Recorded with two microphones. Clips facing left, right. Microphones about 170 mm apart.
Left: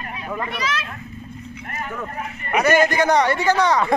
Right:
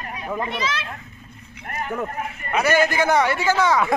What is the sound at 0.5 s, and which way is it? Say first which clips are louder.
Speech: even; 25° right (ahead or behind).